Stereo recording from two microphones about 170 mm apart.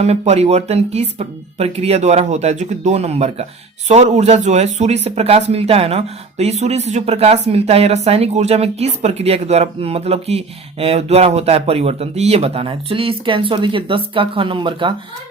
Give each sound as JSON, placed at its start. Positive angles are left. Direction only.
{"t": 0.0, "sound": "speech", "side_deg": -40}